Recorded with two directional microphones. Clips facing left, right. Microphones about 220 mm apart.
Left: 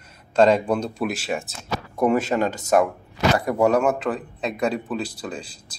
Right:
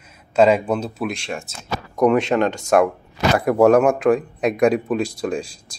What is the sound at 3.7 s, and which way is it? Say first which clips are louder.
Speech: right 6 dB; 10° right (ahead or behind).